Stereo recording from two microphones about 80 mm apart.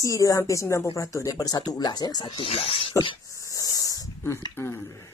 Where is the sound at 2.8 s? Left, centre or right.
Left.